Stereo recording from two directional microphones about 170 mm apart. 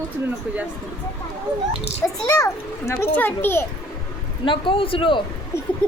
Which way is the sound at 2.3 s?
20° left (ahead or behind).